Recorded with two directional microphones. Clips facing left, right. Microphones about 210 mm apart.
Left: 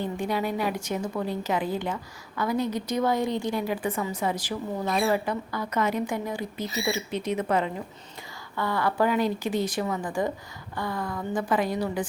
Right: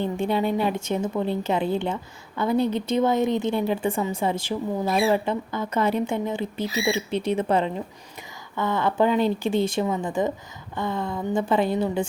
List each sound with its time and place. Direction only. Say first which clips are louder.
0.0 s speech: right 4 dB; 25° right (ahead or behind)
4.9 s speech: right 3 dB; centre (ahead or behind)
5.1 s speech: right 3 dB; 25° right (ahead or behind)